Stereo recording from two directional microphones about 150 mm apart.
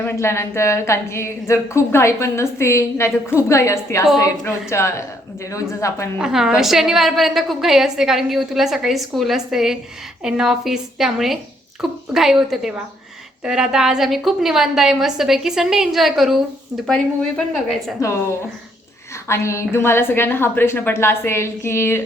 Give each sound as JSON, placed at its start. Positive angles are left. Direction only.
{"t": 0.0, "sound": "a woman's voice", "side_deg": 15}
{"t": 6.1, "sound": "a woman's voice", "side_deg": -5}
{"t": 19.3, "sound": "a woman's voice", "side_deg": 20}